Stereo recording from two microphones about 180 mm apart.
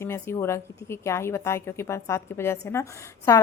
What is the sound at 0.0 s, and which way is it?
A woman's voice, 15° left (ahead or behind).